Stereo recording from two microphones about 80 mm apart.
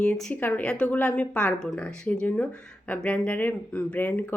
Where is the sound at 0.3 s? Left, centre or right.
Left.